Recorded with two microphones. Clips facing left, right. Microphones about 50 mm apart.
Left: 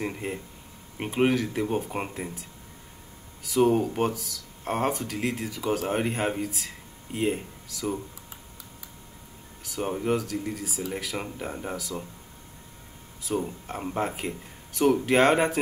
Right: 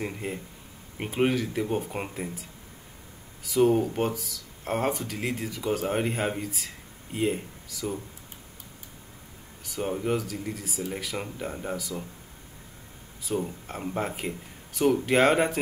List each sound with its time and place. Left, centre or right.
0.0 s speech: centre
3.4 s speech: centre
9.6 s speech: centre
13.2 s speech: centre